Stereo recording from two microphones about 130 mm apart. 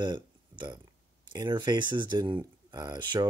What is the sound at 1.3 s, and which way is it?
Speech, 35° right (ahead or behind).